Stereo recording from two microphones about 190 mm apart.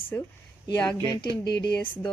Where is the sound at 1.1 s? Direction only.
25° left (ahead or behind).